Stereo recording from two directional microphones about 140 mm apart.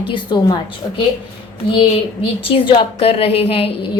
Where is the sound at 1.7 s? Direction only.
40° left (ahead or behind).